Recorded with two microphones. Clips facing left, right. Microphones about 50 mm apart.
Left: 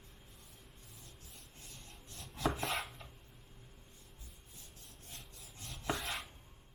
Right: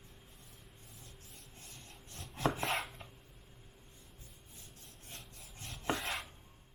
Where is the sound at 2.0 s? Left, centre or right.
Right.